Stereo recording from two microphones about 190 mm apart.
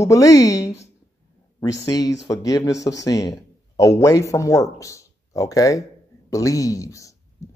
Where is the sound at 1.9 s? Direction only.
20° left (ahead or behind).